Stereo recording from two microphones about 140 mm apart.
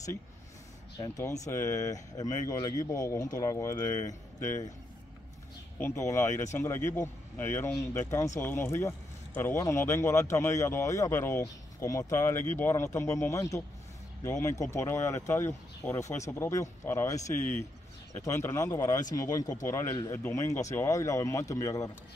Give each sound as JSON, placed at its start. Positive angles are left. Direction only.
{"t": 0.9, "sound": "speech", "side_deg": 25}
{"t": 5.8, "sound": "speech", "side_deg": 20}